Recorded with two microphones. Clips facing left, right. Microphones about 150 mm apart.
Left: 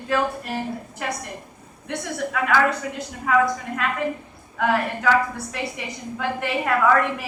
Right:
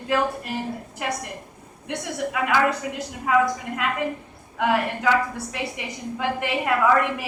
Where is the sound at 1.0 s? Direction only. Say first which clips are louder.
Right 2 dB; 15° right (ahead or behind).